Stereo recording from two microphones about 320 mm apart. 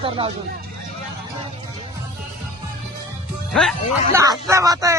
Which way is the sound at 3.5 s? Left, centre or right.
Centre.